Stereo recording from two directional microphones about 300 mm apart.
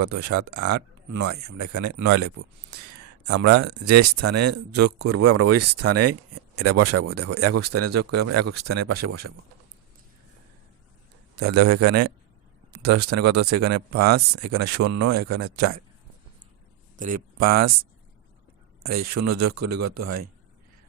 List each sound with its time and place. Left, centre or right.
0.1 s speech: right
3.4 s speech: right
11.3 s speech: right
17.0 s speech: right
17.4 s speech: right
18.8 s speech: right